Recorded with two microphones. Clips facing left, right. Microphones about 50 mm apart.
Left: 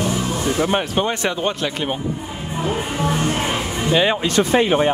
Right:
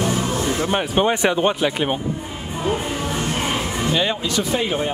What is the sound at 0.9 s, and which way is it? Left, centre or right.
Speech, centre.